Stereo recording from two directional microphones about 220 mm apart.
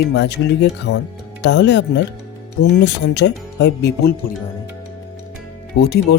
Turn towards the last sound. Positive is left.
turn(degrees=45)  # may be behind; listen again after turning